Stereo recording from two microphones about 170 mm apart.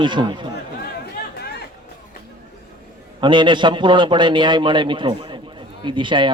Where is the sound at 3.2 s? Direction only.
30° right (ahead or behind).